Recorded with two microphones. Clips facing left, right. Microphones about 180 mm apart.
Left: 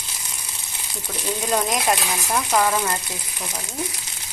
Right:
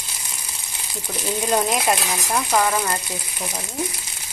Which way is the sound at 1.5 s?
5° right (ahead or behind).